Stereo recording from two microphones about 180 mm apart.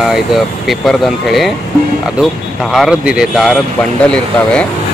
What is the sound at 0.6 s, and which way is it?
Speech, centre (ahead or behind).